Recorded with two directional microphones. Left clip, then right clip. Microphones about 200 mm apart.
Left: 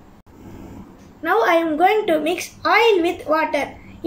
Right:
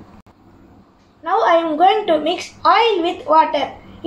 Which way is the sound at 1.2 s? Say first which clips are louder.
Right 2 dB; 20° left (ahead or behind).